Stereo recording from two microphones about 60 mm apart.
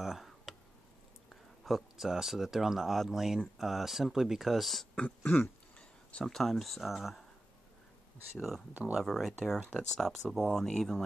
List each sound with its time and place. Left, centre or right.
0.0 s a sound: centre
1.3 s speech: centre
4.9 s a sound: left
6.2 s speech: centre
8.4 s speech: centre
8.7 s speech: right
9.0 s speech: centre